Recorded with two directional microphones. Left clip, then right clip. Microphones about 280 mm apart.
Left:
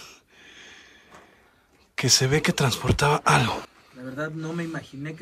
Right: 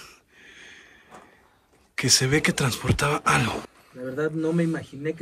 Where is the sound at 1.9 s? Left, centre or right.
Centre.